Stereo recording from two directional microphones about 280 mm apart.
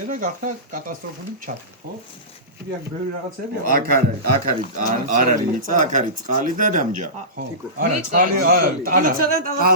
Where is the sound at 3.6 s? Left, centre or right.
Right.